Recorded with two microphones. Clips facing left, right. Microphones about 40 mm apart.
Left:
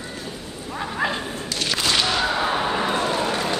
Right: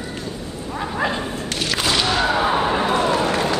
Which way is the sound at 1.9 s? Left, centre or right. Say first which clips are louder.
Right 4 dB; centre.